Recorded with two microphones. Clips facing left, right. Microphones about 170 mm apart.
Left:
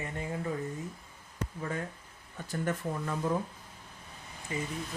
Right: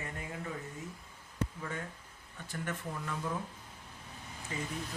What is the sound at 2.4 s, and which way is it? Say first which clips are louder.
Speech: left 6 dB; 35° left (ahead or behind).